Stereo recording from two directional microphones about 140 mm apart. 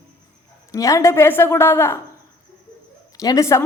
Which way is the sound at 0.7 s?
25° left (ahead or behind).